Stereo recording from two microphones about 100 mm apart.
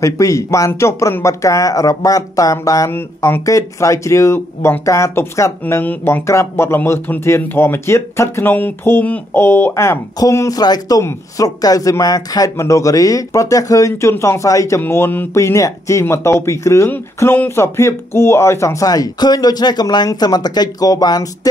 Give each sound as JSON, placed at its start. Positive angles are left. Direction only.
{"t": 0.0, "sound": "speech", "side_deg": 30}
{"t": 2.9, "sound": "speech", "side_deg": 25}
{"t": 11.0, "sound": "speech", "side_deg": 30}